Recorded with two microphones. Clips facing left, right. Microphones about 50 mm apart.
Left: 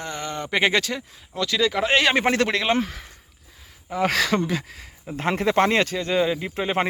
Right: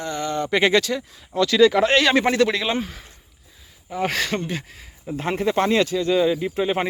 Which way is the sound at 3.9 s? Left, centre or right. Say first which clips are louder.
Left 2 dB; left.